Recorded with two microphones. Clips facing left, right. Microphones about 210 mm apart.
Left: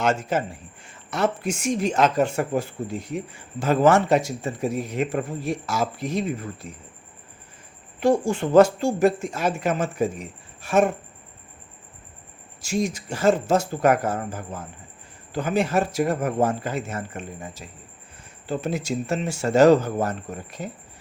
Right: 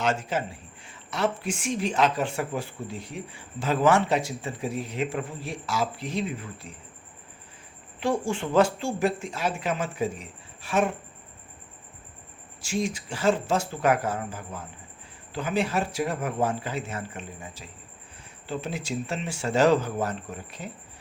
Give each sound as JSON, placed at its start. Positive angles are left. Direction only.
{"t": 0.0, "sound": "a woman's voice", "side_deg": 45}
{"t": 7.9, "sound": "a woman's voice", "side_deg": 40}
{"t": 12.6, "sound": "a woman's voice", "side_deg": 40}